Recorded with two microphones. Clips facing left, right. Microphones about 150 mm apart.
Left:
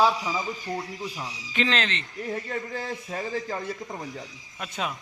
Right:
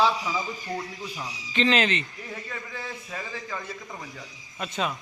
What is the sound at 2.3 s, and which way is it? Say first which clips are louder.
A man's voice: left 7 dB; 45° left (ahead or behind).